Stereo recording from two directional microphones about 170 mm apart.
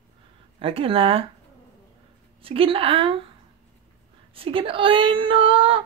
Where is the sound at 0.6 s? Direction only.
35° right (ahead or behind).